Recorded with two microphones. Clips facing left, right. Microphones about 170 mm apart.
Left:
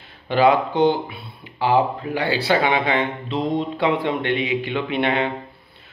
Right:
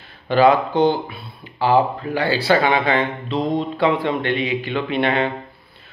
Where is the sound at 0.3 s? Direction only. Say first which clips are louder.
Right 2 dB; 15° left (ahead or behind).